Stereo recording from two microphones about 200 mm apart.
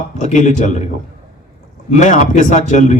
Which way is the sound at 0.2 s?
35° left (ahead or behind).